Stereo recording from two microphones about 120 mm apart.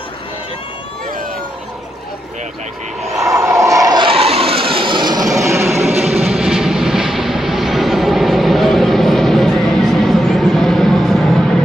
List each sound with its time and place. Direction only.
3.2 s a sound: 25° right (ahead or behind)
4.0 s vehicle: 55° right (ahead or behind); by 5.7 s 25° right (ahead or behind)
5.7 s vehicle: centre (ahead or behind)